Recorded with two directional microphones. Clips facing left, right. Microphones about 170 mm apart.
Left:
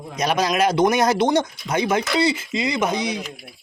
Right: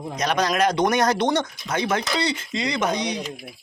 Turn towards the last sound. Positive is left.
turn(degrees=5)  # may be behind; listen again after turning